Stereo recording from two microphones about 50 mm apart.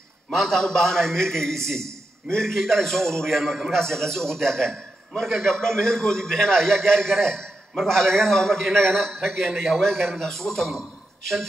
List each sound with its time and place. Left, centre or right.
0.3 s a man's voice: centre